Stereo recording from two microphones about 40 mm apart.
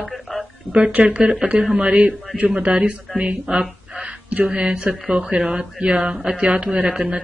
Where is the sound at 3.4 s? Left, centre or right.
Right.